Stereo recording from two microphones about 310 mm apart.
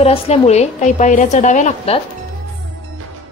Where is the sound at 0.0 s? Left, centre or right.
Centre.